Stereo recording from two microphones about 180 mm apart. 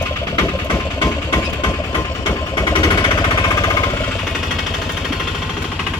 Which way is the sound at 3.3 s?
20° left (ahead or behind).